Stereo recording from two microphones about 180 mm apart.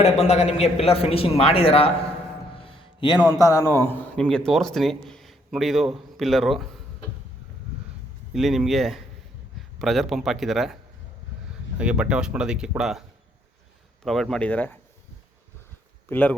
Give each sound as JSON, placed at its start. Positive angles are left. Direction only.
{"t": 0.0, "sound": "a man's voice", "side_deg": 35}
{"t": 2.6, "sound": "music", "side_deg": 25}
{"t": 3.2, "sound": "speech", "side_deg": 20}
{"t": 8.3, "sound": "a man's voice", "side_deg": 0}
{"t": 11.8, "sound": "speech", "side_deg": -5}
{"t": 16.0, "sound": "speech", "side_deg": 10}